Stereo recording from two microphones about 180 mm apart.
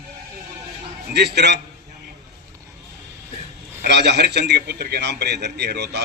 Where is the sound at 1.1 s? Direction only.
65° right (ahead or behind).